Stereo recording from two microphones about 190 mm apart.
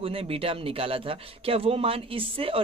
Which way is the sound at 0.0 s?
30° right (ahead or behind).